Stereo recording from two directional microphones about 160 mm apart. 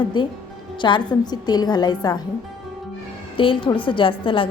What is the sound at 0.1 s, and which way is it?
A woman's voice, 30° left (ahead or behind).